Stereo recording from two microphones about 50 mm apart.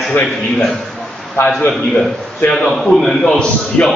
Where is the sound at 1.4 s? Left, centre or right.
Left.